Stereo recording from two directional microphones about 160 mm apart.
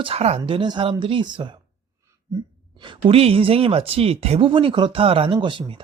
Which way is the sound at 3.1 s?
35° right (ahead or behind).